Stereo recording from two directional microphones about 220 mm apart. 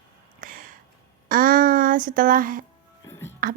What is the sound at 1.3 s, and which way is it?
Speech, 40° right (ahead or behind).